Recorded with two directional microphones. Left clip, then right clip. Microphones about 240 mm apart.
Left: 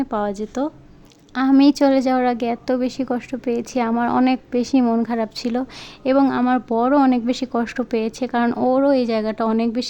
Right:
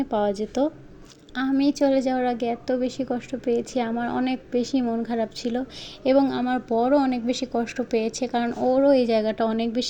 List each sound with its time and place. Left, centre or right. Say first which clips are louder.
0.0 s a woman's voice: left 1 dB; centre
8.4 s speech: left 5 dB; left
8.7 s a woman's voice: right 1 dB; centre